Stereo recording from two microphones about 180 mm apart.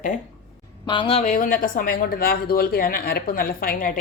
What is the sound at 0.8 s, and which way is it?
Speech, 25° left (ahead or behind).